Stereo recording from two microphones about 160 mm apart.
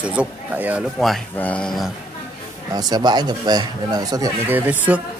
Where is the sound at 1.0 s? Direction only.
5° left (ahead or behind).